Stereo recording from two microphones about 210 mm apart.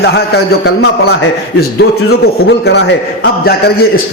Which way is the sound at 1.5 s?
50° left (ahead or behind).